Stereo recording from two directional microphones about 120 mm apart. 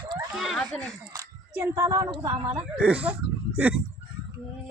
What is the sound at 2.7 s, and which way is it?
Speech, 10° right (ahead or behind).